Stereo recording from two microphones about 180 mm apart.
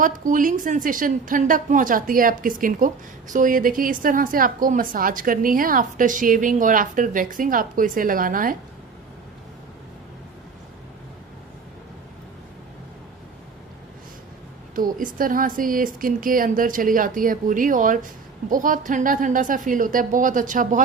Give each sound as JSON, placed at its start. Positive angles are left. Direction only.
{"t": 0.0, "sound": "a woman's voice", "side_deg": -50}
{"t": 14.8, "sound": "a woman's voice", "side_deg": -50}